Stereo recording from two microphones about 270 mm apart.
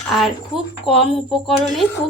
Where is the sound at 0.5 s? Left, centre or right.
Centre.